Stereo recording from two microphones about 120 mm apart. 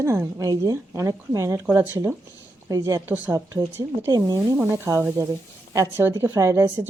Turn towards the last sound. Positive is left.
turn(degrees=-25)  # may be behind; listen again after turning